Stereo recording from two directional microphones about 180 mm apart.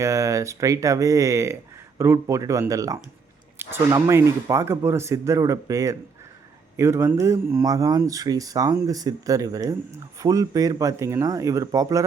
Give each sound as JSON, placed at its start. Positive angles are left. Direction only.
{"t": 0.0, "sound": "speech", "side_deg": -15}